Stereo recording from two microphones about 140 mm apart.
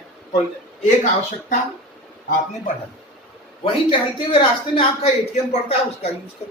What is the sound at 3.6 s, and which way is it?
A man's voice, 40° left (ahead or behind).